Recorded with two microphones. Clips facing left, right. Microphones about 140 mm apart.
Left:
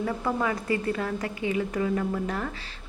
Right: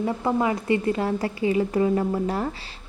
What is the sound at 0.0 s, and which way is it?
Speech, 25° right (ahead or behind).